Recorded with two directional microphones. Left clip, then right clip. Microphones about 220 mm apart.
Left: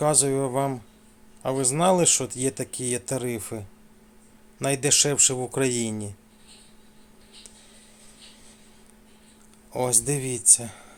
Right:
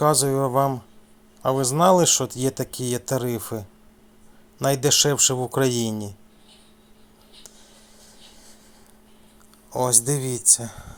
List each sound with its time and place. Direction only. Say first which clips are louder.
0.0 s speech: right 3 dB; 15° right (ahead or behind)
9.7 s speech: right 3 dB; 15° right (ahead or behind)